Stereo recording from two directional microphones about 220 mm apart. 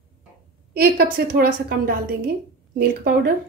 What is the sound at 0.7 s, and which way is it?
A woman's voice, 45° right (ahead or behind).